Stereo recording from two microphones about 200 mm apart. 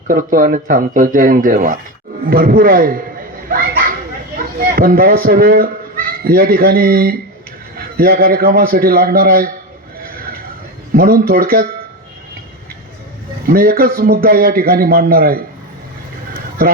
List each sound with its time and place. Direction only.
0.1 s a man's voice: 45° right (ahead or behind)
3.5 s children playing: 45° right (ahead or behind)
4.7 s a man's voice: 45° right (ahead or behind)
10.9 s a man's voice: 50° right (ahead or behind)
13.5 s a man's voice: 50° right (ahead or behind)